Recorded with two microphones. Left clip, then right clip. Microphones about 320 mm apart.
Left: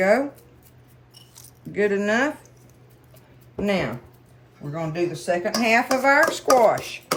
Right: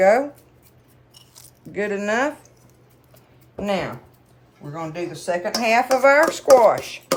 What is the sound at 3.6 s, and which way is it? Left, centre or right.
Speech, centre.